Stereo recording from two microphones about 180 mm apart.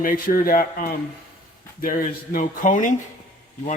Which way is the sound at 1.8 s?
50° left (ahead or behind).